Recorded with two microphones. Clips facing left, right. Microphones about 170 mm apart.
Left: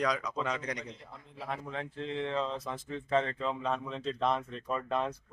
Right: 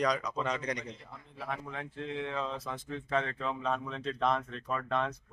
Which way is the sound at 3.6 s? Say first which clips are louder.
Even; centre (ahead or behind).